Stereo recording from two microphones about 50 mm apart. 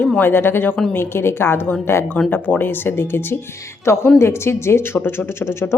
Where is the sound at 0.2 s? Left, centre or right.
Left.